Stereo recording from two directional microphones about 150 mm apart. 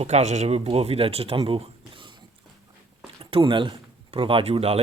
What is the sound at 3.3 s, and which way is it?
Speech, 35° right (ahead or behind).